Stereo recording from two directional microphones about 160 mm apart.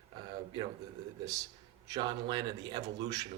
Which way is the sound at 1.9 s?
30° right (ahead or behind).